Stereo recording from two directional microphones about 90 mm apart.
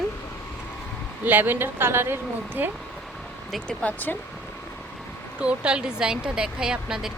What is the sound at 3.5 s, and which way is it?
Speech, 15° left (ahead or behind).